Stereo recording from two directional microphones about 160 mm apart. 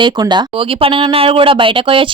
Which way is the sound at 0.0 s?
30° right (ahead or behind).